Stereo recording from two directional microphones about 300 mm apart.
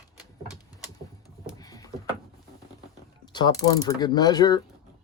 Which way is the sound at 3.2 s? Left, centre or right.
Centre.